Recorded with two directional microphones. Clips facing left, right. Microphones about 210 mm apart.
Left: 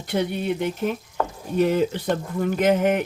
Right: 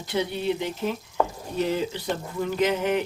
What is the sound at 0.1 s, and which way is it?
Speech, 55° left (ahead or behind).